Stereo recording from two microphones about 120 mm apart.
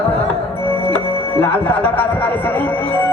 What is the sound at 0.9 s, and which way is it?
Music, 15° left (ahead or behind).